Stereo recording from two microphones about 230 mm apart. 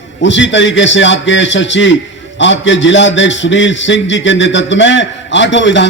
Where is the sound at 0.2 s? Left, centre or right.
Left.